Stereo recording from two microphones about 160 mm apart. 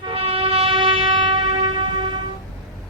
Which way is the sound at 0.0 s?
35° right (ahead or behind).